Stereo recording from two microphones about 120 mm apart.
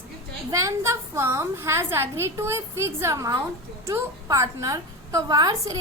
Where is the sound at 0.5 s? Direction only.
25° right (ahead or behind).